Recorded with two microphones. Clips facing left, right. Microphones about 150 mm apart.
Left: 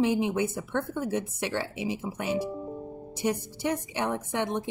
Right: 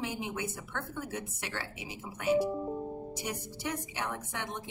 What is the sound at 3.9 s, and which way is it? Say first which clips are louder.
Speech: left 8 dB; 25° left (ahead or behind).